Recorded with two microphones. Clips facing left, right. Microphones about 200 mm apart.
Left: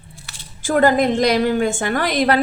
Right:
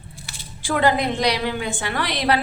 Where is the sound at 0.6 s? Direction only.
45° left (ahead or behind).